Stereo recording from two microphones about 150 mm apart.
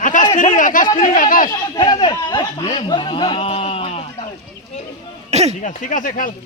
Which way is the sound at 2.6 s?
35° left (ahead or behind).